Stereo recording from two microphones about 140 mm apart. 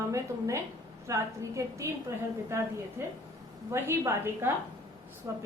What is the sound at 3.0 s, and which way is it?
A woman's voice, 20° right (ahead or behind).